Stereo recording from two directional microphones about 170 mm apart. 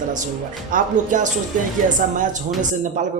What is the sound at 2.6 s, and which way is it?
Speech, 45° right (ahead or behind).